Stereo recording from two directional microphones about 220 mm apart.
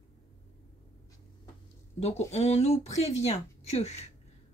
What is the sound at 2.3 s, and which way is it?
Speech, 30° left (ahead or behind).